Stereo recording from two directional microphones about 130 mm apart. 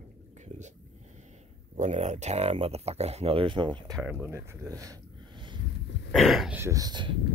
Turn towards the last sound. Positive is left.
turn(degrees=-35)  # may be behind; listen again after turning